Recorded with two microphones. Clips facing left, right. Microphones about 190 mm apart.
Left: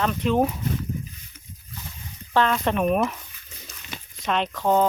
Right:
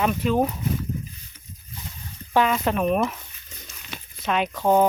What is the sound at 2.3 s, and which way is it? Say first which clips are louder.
Speech: even; 5° right (ahead or behind).